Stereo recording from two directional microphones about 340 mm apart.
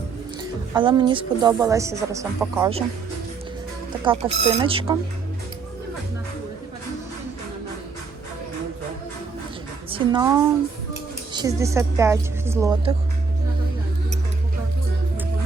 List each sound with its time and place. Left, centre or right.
0.7 s a woman's voice: centre
4.0 s a woman's voice: centre
9.9 s a woman's voice: centre